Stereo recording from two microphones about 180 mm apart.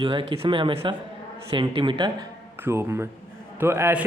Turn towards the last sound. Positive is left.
turn(degrees=-15)  # may be behind; listen again after turning